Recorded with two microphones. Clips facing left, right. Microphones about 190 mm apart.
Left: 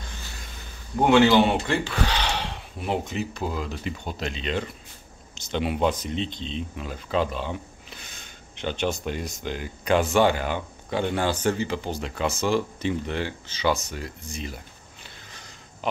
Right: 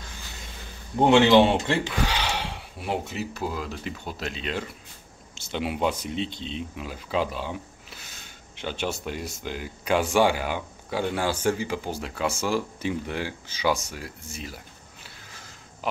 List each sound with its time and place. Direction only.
1.0 s speech: 25° right (ahead or behind)
2.0 s speech: 10° right (ahead or behind)
15.0 s a sound: 5° right (ahead or behind)